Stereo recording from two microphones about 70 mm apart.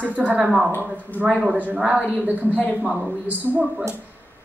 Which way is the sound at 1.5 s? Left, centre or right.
Centre.